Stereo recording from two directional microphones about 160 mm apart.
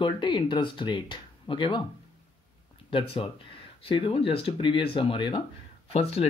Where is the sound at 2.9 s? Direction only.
35° left (ahead or behind).